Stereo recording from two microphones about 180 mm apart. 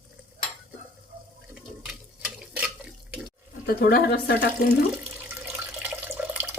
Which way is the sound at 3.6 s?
60° left (ahead or behind).